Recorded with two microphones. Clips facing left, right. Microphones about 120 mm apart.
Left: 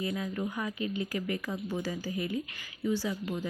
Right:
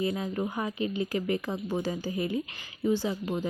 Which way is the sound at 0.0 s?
25° right (ahead or behind).